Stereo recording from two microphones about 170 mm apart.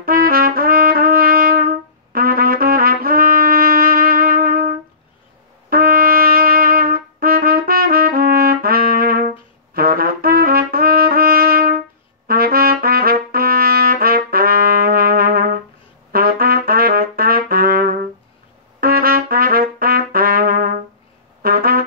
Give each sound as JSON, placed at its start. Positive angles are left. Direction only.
{"t": 0.0, "sound": "trumpet", "side_deg": -60}
{"t": 21.4, "sound": "brass instrument", "side_deg": -60}